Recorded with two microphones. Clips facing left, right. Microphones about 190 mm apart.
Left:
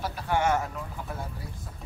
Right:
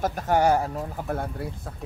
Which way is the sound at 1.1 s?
60° right (ahead or behind).